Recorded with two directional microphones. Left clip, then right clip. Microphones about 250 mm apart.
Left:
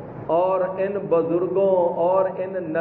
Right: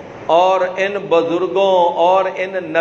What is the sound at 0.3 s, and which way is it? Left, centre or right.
A man's voice, right.